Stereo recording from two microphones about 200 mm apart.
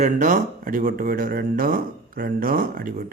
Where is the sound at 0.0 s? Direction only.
40° right (ahead or behind).